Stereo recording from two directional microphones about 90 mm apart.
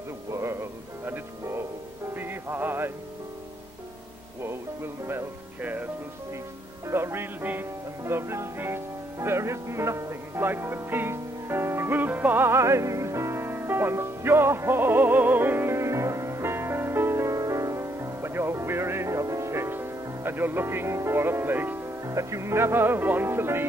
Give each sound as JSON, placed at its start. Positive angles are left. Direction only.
{"t": 0.3, "sound": "music", "side_deg": -30}
{"t": 4.4, "sound": "music", "side_deg": -25}
{"t": 6.9, "sound": "music", "side_deg": -25}